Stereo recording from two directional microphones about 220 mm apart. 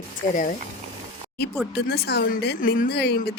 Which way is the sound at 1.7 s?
45° left (ahead or behind).